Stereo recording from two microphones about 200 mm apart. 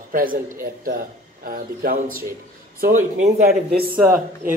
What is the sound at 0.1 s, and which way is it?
Speech, 45° right (ahead or behind).